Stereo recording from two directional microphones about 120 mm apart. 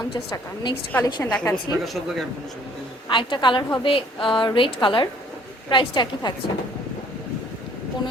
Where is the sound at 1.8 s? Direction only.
Centre (ahead or behind).